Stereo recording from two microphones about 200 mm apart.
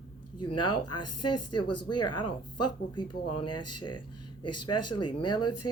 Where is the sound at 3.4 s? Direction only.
20° left (ahead or behind).